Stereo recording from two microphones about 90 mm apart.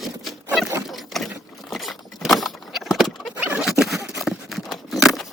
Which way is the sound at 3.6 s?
5° right (ahead or behind).